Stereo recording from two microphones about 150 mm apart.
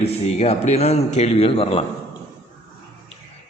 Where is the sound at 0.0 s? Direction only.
45° left (ahead or behind).